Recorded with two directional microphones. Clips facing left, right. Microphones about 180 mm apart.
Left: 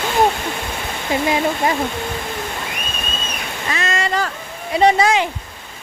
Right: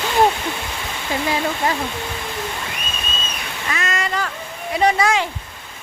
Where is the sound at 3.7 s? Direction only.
25° left (ahead or behind).